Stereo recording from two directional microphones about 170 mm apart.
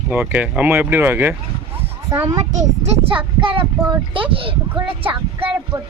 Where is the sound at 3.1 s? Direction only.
30° right (ahead or behind).